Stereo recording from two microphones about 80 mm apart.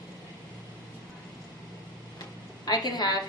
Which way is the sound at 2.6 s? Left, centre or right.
Left.